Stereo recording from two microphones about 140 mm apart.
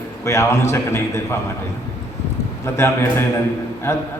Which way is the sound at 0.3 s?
20° left (ahead or behind).